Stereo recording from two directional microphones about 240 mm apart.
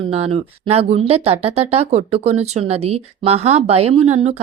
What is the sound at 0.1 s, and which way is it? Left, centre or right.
Speech, right.